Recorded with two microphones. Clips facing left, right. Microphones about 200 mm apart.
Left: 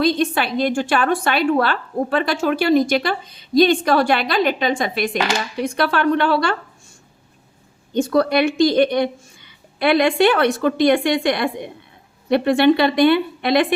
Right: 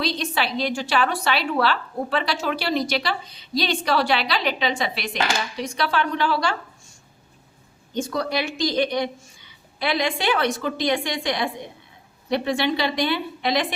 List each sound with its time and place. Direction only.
0.0 s a woman's voice: 50° left (ahead or behind)
7.9 s a woman's voice: 60° left (ahead or behind)